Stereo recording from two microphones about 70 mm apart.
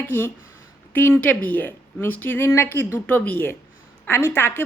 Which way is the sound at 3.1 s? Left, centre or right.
Left.